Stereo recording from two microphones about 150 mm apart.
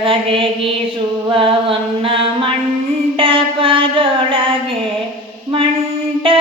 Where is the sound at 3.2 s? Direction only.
35° right (ahead or behind).